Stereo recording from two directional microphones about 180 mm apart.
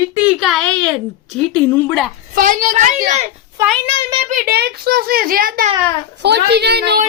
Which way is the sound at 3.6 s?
15° right (ahead or behind).